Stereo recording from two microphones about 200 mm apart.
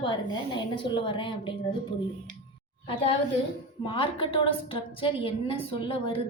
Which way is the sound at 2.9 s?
30° left (ahead or behind).